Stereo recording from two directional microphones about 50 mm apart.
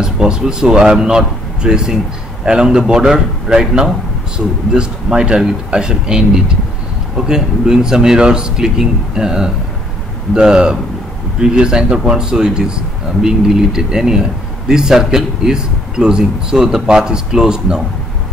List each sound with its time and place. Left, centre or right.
0.0 s speech: centre